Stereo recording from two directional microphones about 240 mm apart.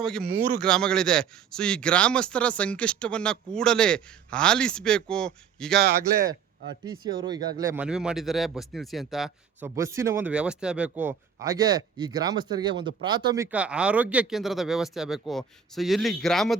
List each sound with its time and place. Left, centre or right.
0.0 s a man's voice: centre
5.8 s speech: right
6.8 s speech: centre
7.8 s a man's voice: centre